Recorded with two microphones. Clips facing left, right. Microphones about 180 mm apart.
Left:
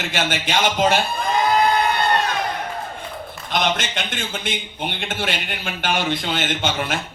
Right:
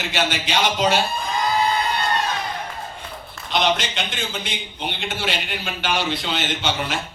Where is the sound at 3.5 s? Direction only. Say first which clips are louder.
Right 1 dB; 50° left (ahead or behind).